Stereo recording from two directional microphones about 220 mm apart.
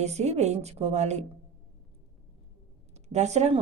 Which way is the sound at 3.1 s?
30° right (ahead or behind).